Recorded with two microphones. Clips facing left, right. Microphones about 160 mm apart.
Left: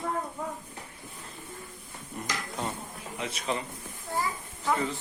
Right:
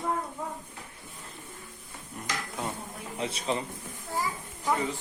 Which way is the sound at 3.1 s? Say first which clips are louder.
Right 2 dB; 30° right (ahead or behind).